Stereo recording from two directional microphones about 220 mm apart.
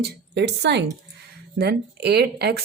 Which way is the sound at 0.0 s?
50° right (ahead or behind).